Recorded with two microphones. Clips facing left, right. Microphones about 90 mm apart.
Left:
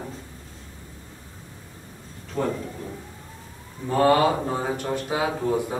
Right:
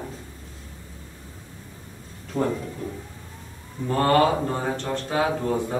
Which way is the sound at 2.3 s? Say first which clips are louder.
Right 1 dB; 5° right (ahead or behind).